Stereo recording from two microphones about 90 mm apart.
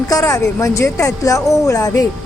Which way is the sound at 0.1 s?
40° left (ahead or behind).